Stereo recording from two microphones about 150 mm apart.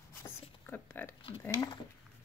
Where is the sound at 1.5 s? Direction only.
25° left (ahead or behind).